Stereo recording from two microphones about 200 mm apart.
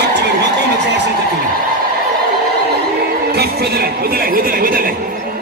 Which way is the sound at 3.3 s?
55° right (ahead or behind).